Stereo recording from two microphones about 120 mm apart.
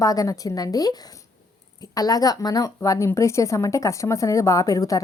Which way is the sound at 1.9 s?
30° left (ahead or behind).